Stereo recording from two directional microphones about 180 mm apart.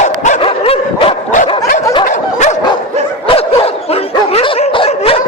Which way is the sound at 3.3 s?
30° left (ahead or behind).